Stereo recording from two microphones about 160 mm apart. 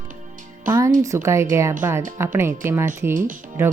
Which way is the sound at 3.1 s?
55° right (ahead or behind).